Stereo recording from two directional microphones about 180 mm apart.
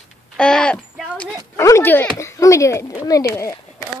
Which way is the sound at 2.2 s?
15° left (ahead or behind).